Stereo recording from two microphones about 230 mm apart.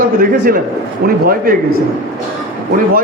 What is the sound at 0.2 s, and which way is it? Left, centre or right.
A man's voice, right.